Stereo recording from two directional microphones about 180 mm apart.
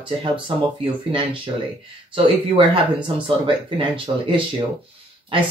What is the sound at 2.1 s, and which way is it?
Speech, 30° right (ahead or behind).